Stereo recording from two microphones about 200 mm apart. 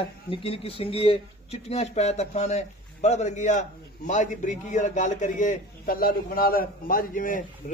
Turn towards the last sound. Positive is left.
turn(degrees=45)  # may be behind; listen again after turning